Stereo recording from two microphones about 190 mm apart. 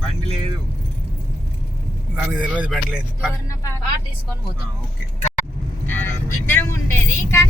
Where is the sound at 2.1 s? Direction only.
5° right (ahead or behind).